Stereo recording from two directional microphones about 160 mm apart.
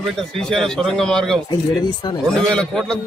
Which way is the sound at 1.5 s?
25° left (ahead or behind).